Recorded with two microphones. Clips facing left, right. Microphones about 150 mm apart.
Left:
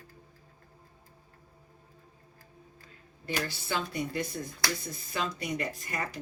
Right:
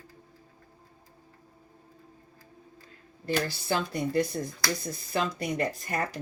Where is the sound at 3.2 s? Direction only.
35° right (ahead or behind).